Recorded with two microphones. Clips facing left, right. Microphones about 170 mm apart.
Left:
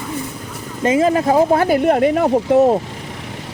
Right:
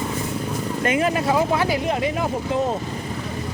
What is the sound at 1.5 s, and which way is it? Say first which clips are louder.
Speech: left 8 dB; 50° left (ahead or behind).